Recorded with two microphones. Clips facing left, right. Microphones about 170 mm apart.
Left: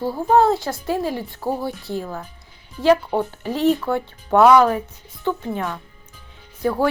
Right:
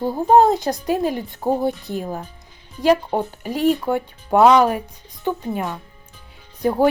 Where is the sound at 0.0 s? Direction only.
20° right (ahead or behind).